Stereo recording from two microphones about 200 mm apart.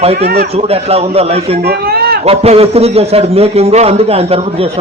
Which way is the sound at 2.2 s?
30° right (ahead or behind).